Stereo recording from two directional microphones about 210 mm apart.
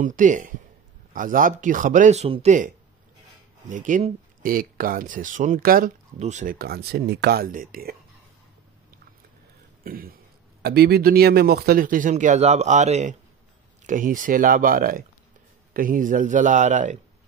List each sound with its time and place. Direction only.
0.0 s speech: 40° right (ahead or behind)
9.8 s speech: 45° right (ahead or behind)